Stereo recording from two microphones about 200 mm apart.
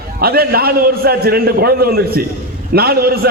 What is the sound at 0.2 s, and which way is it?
A man's voice, 50° right (ahead or behind).